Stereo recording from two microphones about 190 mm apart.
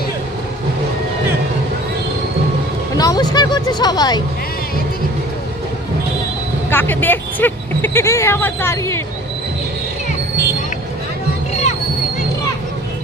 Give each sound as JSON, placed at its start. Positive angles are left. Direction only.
{"t": 3.0, "sound": "speech", "side_deg": 20}
{"t": 6.7, "sound": "speech", "side_deg": 10}